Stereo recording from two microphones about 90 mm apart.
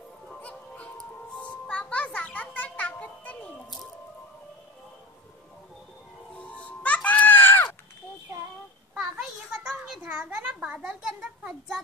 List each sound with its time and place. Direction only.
0.3 s honk: 15° left (ahead or behind)
1.3 s music: 15° left (ahead or behind)
6.3 s music: 15° left (ahead or behind)
9.2 s a sound: 5° right (ahead or behind)